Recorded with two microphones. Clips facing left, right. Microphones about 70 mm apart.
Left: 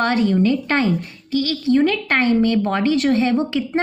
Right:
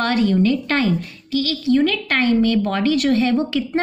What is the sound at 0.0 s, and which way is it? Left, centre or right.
A woman's voice, centre.